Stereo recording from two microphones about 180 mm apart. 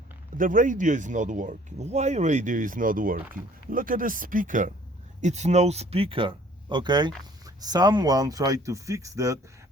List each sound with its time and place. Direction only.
0.3 s speech: 50° right (ahead or behind); by 9.4 s 15° right (ahead or behind)